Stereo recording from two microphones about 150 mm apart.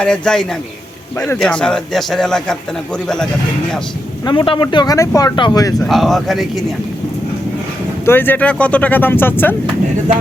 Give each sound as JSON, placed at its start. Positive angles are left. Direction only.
{"t": 0.0, "sound": "a man's voice", "side_deg": 5}
{"t": 4.3, "sound": "speech", "side_deg": 30}
{"t": 5.8, "sound": "a man's voice", "side_deg": 0}
{"t": 8.0, "sound": "speech", "side_deg": 15}